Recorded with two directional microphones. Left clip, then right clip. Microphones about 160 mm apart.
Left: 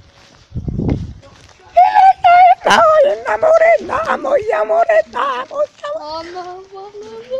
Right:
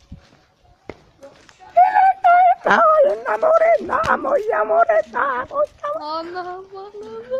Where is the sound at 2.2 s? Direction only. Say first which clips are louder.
Left 5 dB; 5° left (ahead or behind).